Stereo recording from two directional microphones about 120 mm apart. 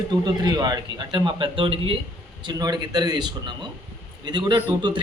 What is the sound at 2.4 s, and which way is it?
Speech, 35° right (ahead or behind).